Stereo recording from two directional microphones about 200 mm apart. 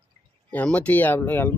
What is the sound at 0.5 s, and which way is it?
Speech, 5° left (ahead or behind).